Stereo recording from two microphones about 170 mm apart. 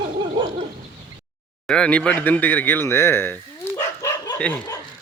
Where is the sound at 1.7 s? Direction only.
5° left (ahead or behind).